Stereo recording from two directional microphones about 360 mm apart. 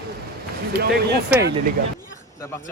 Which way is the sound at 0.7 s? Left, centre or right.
Right.